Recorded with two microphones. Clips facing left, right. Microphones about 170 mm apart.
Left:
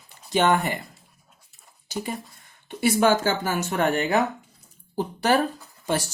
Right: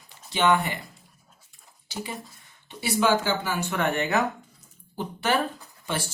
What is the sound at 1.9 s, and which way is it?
Speech, 45° left (ahead or behind).